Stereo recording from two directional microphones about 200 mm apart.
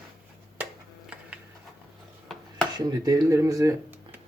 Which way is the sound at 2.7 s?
20° right (ahead or behind).